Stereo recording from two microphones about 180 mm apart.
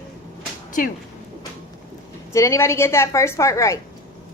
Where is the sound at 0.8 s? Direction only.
50° left (ahead or behind).